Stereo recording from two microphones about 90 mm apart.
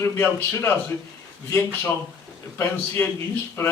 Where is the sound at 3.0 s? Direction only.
25° left (ahead or behind).